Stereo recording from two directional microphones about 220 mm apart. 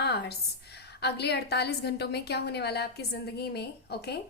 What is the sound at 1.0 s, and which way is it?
A woman's voice, 50° left (ahead or behind).